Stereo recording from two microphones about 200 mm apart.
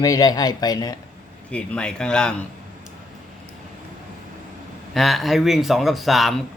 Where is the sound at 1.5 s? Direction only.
5° left (ahead or behind).